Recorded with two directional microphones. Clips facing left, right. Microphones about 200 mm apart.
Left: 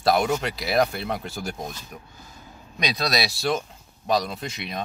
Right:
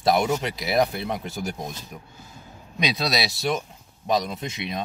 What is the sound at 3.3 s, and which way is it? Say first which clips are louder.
Speech: left 1 dB; 20° right (ahead or behind).